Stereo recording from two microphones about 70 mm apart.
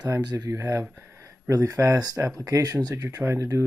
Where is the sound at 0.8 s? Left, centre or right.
Right.